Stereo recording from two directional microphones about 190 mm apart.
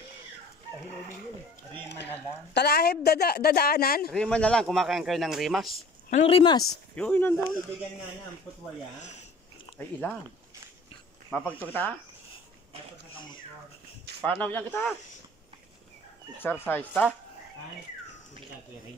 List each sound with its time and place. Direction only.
2.5 s speech: 55° left (ahead or behind)
4.1 s speech: 5° left (ahead or behind)
5.7 s speech: 40° left (ahead or behind); by 6.6 s 25° left (ahead or behind)
7.0 s speech: 10° left (ahead or behind)
9.8 s speech: 10° left (ahead or behind)
11.2 s speech: 10° left (ahead or behind)
14.2 s speech: 10° left (ahead or behind)
16.3 s speech: 10° left (ahead or behind)